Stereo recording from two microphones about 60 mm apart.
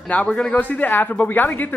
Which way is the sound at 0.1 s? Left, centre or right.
Left.